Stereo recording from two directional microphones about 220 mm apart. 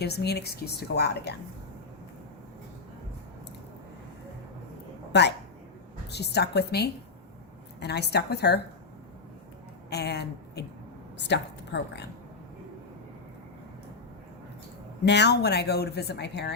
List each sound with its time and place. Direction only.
0.0 s speech: 50° left (ahead or behind)
5.1 s speech: 50° left (ahead or behind)
9.9 s a woman's voice: 50° left (ahead or behind)
15.0 s speech: 50° left (ahead or behind)